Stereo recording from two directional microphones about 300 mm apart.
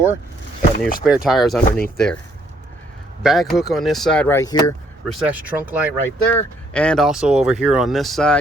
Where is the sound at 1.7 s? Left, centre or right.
Left.